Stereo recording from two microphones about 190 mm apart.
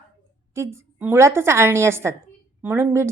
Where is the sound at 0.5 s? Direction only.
15° right (ahead or behind).